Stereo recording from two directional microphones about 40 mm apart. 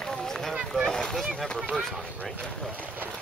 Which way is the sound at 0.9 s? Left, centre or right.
Centre.